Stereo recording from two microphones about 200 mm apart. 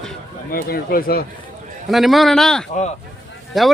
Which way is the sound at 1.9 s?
Centre (ahead or behind).